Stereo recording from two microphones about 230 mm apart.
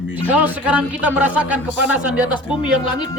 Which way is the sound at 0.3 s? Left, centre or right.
Centre.